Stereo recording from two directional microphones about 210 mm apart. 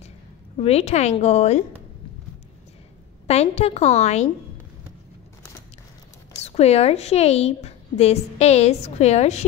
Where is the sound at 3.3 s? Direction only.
30° left (ahead or behind).